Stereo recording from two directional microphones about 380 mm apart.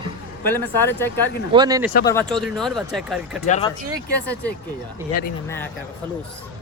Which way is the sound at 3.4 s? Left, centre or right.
Centre.